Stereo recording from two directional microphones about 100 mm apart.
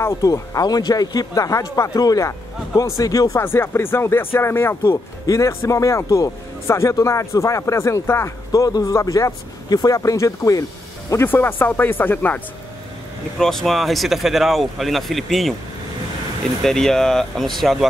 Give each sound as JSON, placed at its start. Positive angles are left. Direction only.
{"t": 0.0, "sound": "speech", "side_deg": 35}
{"t": 3.4, "sound": "speech", "side_deg": 25}
{"t": 8.5, "sound": "speech", "side_deg": 40}
{"t": 11.1, "sound": "speech", "side_deg": 25}
{"t": 13.4, "sound": "speech", "side_deg": 5}
{"t": 16.6, "sound": "speech", "side_deg": 5}